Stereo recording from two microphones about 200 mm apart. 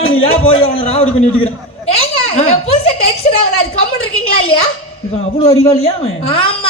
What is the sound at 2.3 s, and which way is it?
A woman's voice, 30° left (ahead or behind).